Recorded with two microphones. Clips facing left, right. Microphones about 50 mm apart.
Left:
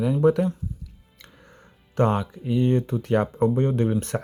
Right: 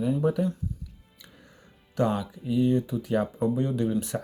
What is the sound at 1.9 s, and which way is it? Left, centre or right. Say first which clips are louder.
Speech: left 4 dB; left.